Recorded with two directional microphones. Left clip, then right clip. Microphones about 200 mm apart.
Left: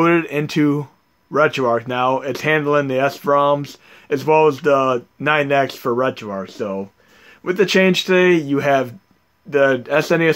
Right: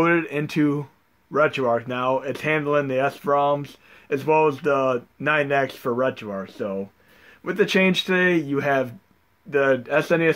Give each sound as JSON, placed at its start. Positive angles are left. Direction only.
{"t": 0.0, "sound": "speech", "side_deg": 35}